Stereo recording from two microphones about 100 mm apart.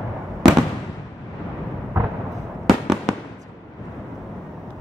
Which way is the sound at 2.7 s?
5° right (ahead or behind).